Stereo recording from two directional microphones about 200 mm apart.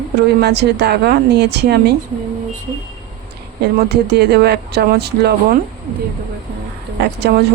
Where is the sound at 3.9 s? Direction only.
55° right (ahead or behind).